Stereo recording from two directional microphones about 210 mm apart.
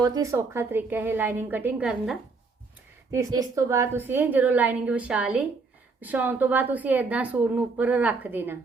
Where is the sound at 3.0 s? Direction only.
15° right (ahead or behind).